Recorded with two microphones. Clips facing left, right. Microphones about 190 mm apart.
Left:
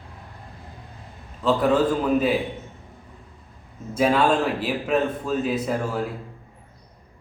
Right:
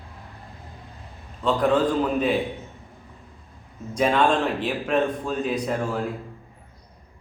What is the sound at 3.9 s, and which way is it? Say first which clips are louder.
A man's voice: left 1 dB; 5° left (ahead or behind).